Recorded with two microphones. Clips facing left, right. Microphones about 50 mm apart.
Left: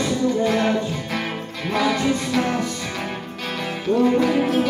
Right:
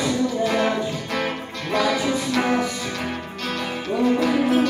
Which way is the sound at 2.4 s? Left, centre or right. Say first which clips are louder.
Right 1 dB; centre.